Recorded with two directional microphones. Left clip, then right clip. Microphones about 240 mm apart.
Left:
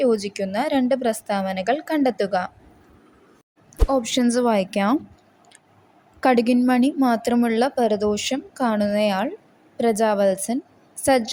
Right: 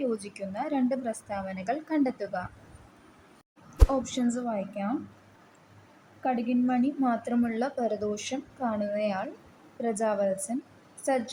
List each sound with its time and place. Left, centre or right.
0.0 s a woman's voice: left
3.8 s a woman's voice: left
6.2 s a woman's voice: left